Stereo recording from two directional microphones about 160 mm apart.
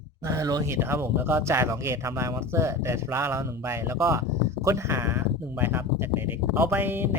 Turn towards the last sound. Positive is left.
turn(degrees=-15)  # may be behind; listen again after turning